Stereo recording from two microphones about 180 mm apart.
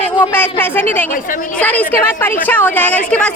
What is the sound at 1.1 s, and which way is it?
Speech, 50° left (ahead or behind).